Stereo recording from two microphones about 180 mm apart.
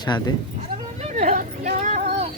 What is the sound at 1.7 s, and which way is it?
Music, 40° right (ahead or behind).